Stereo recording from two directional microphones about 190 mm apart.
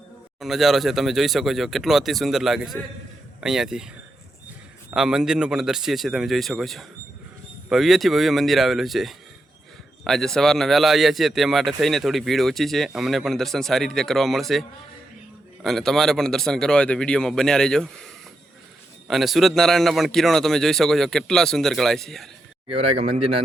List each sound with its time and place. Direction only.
0.3 s a man's voice: centre (ahead or behind)
4.9 s a man's voice: 5° right (ahead or behind)
15.6 s a man's voice: centre (ahead or behind)
22.7 s speech: 30° right (ahead or behind)